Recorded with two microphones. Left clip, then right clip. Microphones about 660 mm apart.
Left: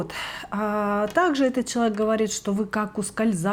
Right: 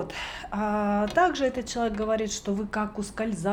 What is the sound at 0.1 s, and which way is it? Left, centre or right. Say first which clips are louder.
Speech: left 3 dB; left.